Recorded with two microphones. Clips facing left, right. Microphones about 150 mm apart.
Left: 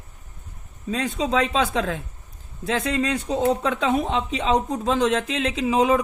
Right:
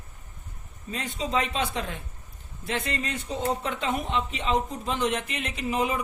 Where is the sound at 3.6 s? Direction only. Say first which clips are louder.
Left 7 dB; 90° left.